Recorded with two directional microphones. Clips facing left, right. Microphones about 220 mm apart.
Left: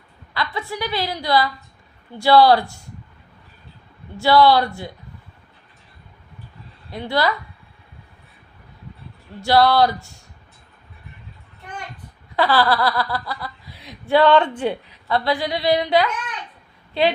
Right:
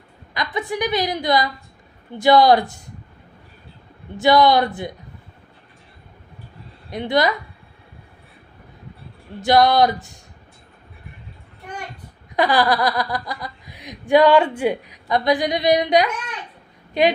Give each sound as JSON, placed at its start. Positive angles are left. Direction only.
{"t": 0.3, "sound": "speech", "side_deg": -15}
{"t": 4.2, "sound": "speech", "side_deg": -20}
{"t": 6.9, "sound": "speech", "side_deg": -20}
{"t": 9.4, "sound": "speech", "side_deg": -15}
{"t": 12.4, "sound": "speech", "side_deg": -15}